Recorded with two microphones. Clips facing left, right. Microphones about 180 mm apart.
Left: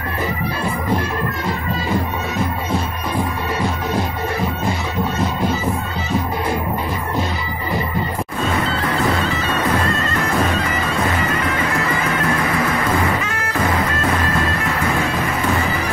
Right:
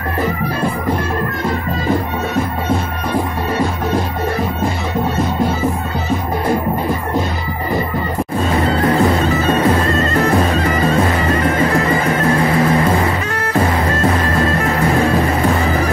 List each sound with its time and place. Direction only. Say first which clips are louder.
9.5 s music: right 5 dB; 35° right (ahead or behind)